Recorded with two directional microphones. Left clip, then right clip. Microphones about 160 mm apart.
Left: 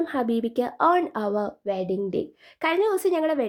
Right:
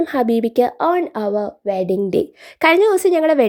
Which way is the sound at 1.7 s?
45° right (ahead or behind).